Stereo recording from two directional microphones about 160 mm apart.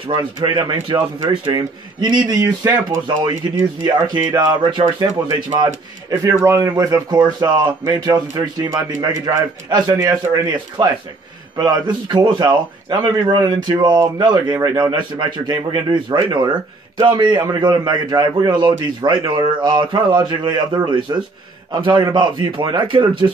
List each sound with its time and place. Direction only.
0.1 s a man's voice: 30° right (ahead or behind)